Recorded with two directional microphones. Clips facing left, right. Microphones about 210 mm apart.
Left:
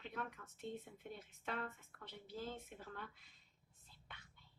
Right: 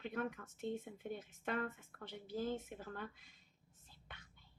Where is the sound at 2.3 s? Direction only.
50° right (ahead or behind).